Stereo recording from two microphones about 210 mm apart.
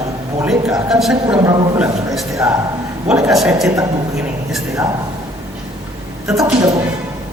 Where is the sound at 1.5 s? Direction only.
15° right (ahead or behind).